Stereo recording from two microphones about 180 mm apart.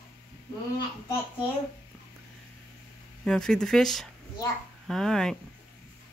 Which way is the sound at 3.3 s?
5° left (ahead or behind).